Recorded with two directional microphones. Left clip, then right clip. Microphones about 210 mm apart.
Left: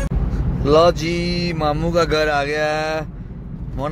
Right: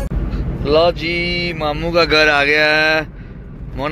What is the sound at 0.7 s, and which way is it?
Speech, 30° left (ahead or behind).